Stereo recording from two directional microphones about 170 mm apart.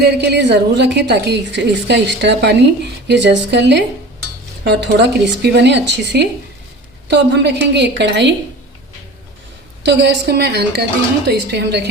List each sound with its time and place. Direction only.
0.0 s a woman's voice: 80° right
9.8 s a woman's voice: 90° right